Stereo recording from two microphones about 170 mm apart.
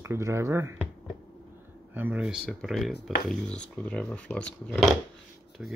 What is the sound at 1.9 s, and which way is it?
Speech, 10° right (ahead or behind).